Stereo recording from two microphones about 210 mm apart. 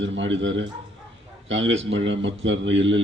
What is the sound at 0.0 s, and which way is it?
A man's voice, 60° right (ahead or behind).